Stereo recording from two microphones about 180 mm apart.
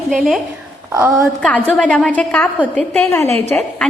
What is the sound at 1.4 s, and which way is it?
A woman's voice, 5° left (ahead or behind).